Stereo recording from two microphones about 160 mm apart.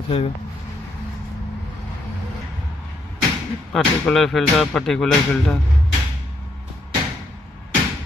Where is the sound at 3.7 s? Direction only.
Centre (ahead or behind).